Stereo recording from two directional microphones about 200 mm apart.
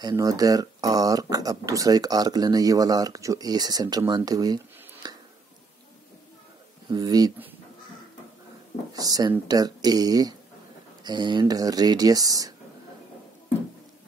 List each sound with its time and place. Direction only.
0.0 s speech: 15° right (ahead or behind)
5.0 s a sound: 20° right (ahead or behind)
6.9 s speech: 20° right (ahead or behind)
8.9 s speech: 20° right (ahead or behind)